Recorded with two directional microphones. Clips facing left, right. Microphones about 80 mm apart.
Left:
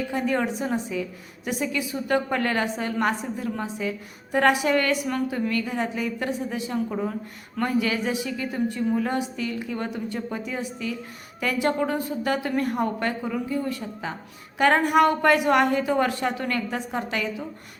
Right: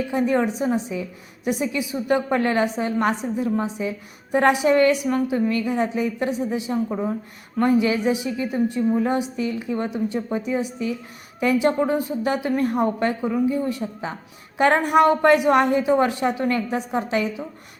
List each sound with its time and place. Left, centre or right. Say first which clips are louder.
0.1 s a woman's voice: right 5 dB; right